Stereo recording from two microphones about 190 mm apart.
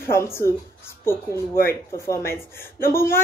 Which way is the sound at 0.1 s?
15° left (ahead or behind).